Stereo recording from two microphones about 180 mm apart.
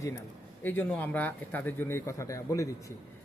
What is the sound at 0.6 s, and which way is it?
Speech, 10° left (ahead or behind).